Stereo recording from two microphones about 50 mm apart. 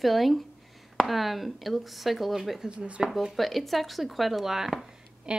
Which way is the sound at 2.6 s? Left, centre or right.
Right.